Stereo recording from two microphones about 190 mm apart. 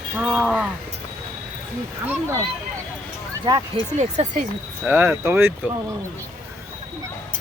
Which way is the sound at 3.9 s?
35° right (ahead or behind).